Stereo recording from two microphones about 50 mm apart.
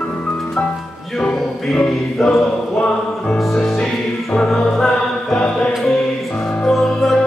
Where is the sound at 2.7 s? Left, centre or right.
Left.